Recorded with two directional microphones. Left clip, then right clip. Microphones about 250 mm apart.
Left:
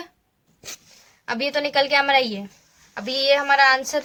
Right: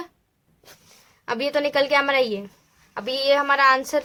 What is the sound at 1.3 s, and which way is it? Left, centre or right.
Speech, right.